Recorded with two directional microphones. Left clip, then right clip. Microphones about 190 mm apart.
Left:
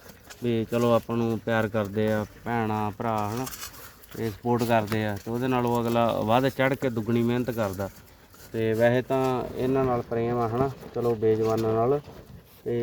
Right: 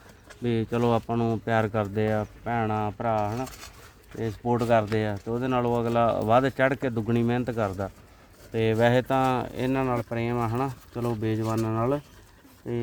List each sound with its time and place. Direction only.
0.4 s speech: 20° right (ahead or behind)
2.4 s speech: centre (ahead or behind)
3.4 s speech: 50° left (ahead or behind)
4.2 s speech: 5° right (ahead or behind)
6.8 s speech: 15° right (ahead or behind)
8.5 s speech: 55° right (ahead or behind); by 11.9 s 90° right